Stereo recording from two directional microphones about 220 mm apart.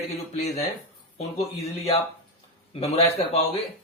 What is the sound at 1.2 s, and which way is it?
Speech, 30° left (ahead or behind).